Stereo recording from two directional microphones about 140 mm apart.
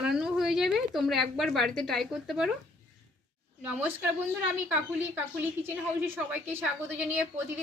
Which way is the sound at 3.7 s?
10° right (ahead or behind).